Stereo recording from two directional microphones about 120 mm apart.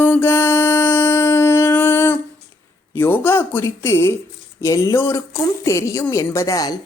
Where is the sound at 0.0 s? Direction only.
20° left (ahead or behind).